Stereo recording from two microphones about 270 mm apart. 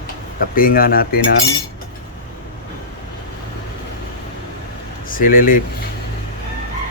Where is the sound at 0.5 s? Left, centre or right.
Left.